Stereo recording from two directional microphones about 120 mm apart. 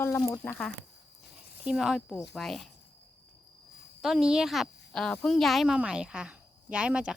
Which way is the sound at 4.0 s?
5° right (ahead or behind).